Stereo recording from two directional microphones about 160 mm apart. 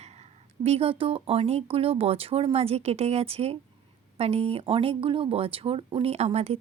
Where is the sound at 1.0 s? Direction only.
35° right (ahead or behind).